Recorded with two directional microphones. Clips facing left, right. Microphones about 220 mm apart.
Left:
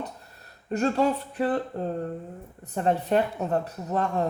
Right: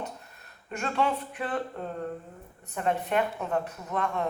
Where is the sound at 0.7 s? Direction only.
40° left (ahead or behind).